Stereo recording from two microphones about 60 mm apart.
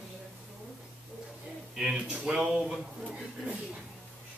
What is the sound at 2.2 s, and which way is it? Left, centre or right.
Speech, centre.